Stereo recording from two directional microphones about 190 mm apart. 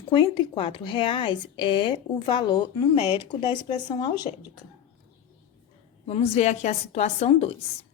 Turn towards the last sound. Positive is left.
turn(degrees=30)  # may be behind; listen again after turning